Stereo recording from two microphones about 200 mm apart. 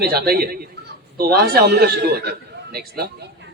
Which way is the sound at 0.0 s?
50° right (ahead or behind).